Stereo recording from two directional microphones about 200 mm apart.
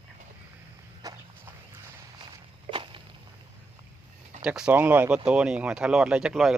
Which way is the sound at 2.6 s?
25° right (ahead or behind).